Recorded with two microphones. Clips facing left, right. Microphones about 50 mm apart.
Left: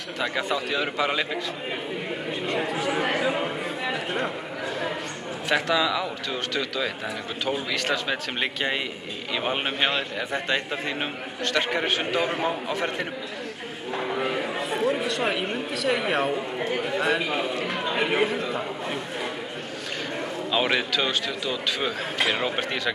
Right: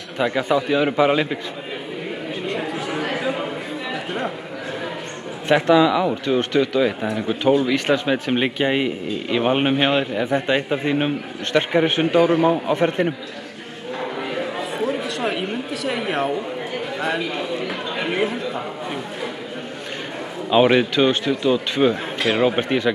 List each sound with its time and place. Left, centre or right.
0.2 s speech: centre
2.4 s a sound: centre
3.9 s chatter: centre
5.5 s speech: right
12.2 s a man's voice: centre
12.4 s speech: right
13.9 s a sound: centre
17.8 s a man's voice: centre
20.5 s speech: centre